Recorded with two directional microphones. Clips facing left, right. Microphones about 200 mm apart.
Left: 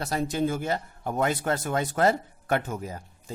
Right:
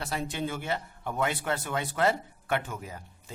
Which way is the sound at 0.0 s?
40° left (ahead or behind).